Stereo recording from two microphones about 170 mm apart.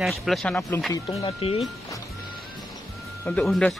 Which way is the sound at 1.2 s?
35° left (ahead or behind).